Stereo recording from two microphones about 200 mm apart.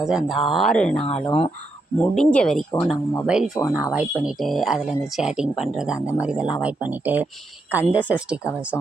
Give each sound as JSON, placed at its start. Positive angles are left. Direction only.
{"t": 0.0, "sound": "speech", "side_deg": -5}
{"t": 1.0, "sound": "speech", "side_deg": 30}
{"t": 2.0, "sound": "speech", "side_deg": 5}
{"t": 8.7, "sound": "speech", "side_deg": 10}